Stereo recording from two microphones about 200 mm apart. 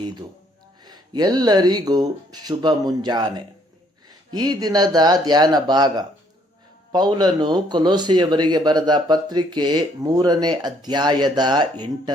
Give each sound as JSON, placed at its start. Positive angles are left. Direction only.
{"t": 0.0, "sound": "speech", "side_deg": -20}